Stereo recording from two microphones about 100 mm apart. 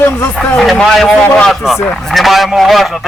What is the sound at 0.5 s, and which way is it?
A man's voice, 5° left (ahead or behind).